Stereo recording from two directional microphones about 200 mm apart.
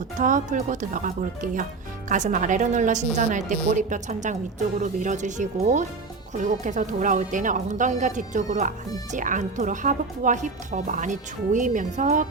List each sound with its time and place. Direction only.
0.2 s speech: 40° right (ahead or behind)